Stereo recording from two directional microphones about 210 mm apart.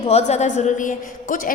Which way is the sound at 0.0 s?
30° left (ahead or behind).